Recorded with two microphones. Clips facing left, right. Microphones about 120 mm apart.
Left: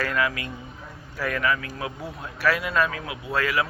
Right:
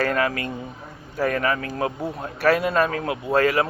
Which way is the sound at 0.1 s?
45° right (ahead or behind).